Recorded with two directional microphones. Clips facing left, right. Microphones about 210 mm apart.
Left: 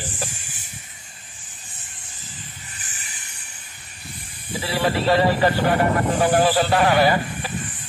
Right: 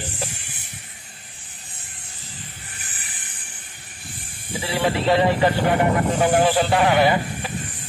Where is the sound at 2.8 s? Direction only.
55° right (ahead or behind).